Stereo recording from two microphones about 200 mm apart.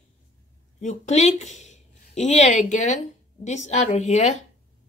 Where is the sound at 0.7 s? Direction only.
35° left (ahead or behind).